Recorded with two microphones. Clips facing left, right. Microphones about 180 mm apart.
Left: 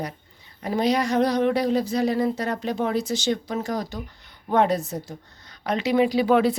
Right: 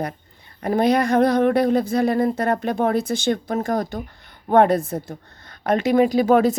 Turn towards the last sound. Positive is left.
turn(degrees=-45)  # may be behind; listen again after turning